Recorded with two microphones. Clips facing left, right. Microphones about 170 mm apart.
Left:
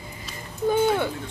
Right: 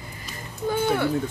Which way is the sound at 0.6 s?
20° left (ahead or behind).